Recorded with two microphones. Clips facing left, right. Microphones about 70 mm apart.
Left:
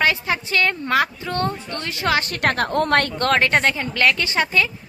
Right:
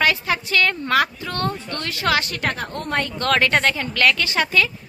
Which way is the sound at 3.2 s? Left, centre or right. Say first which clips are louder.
Left 1 dB; left.